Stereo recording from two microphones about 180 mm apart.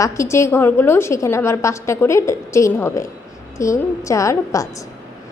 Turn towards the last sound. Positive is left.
turn(degrees=15)  # may be behind; listen again after turning